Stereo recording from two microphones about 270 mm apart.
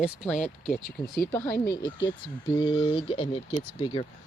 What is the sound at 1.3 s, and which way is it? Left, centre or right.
Speech, centre.